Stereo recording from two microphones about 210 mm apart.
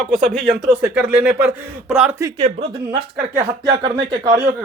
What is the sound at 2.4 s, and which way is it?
Speech, 35° right (ahead or behind).